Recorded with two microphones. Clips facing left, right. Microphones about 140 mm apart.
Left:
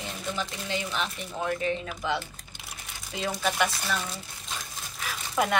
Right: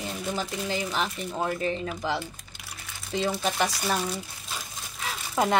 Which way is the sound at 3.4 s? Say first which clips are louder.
Right 1 dB; 35° right (ahead or behind).